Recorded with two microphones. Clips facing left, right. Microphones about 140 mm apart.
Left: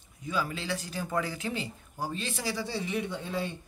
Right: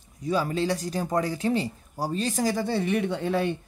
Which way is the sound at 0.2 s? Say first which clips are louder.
Right 8 dB; 40° right (ahead or behind).